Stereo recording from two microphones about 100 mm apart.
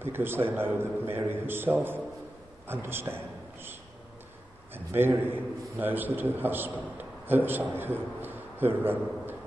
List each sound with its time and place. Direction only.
0.0 s a man's voice: 20° right (ahead or behind)
4.7 s a man's voice: 20° right (ahead or behind)